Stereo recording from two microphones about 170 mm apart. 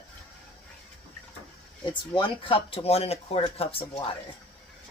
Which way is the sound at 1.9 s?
30° left (ahead or behind).